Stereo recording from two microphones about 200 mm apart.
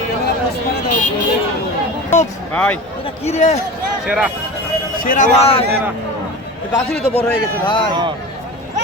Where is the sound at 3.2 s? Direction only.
35° left (ahead or behind).